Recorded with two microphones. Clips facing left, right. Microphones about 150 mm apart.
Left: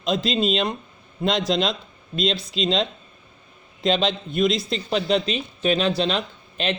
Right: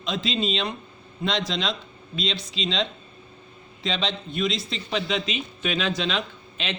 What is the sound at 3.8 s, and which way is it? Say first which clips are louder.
Speech: left 7 dB; 45° left (ahead or behind).